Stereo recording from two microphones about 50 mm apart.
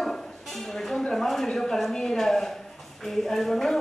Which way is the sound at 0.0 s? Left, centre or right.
Centre.